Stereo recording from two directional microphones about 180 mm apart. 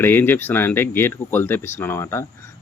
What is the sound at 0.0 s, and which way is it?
Speech, 10° left (ahead or behind).